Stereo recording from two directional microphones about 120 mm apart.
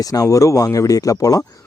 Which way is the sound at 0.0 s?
30° left (ahead or behind).